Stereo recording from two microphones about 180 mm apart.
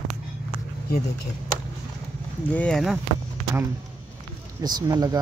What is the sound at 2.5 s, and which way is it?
Speech, 5° left (ahead or behind).